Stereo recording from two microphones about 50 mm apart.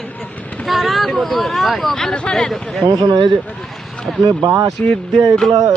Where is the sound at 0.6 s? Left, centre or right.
Centre.